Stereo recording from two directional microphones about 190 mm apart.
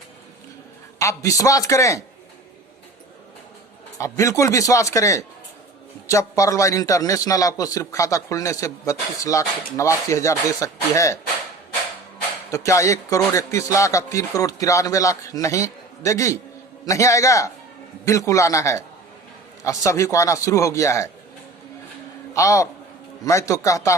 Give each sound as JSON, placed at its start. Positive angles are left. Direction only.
{"t": 0.9, "sound": "a man's voice", "side_deg": 15}
{"t": 3.9, "sound": "a man's voice", "side_deg": 15}
{"t": 12.5, "sound": "a man's voice", "side_deg": 15}
{"t": 22.4, "sound": "a man's voice", "side_deg": 15}